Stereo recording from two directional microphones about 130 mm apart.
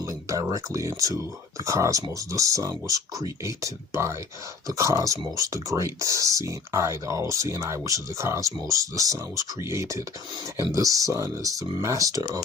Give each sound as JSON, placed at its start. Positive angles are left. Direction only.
{"t": 0.0, "sound": "speech", "side_deg": -25}